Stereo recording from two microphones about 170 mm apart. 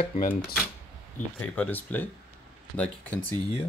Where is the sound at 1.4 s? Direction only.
10° left (ahead or behind).